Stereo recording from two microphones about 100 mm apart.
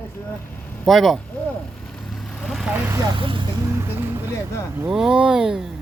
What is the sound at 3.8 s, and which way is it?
Speech, 25° right (ahead or behind).